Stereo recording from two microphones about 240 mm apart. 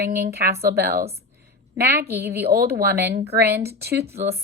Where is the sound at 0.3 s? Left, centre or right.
Right.